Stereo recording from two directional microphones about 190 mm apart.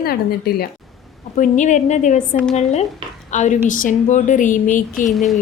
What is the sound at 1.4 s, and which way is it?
Speech, 40° left (ahead or behind).